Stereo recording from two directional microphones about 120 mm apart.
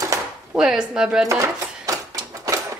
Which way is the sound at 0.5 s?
5° right (ahead or behind).